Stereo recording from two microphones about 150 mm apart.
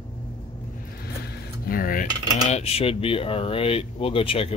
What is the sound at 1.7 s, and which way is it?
Cutlery, 70° left (ahead or behind).